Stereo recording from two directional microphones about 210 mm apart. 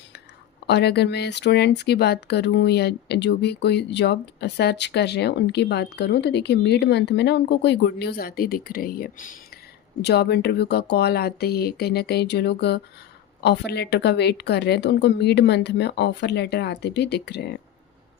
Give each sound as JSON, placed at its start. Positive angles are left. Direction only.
{"t": 0.7, "sound": "speech", "side_deg": 50}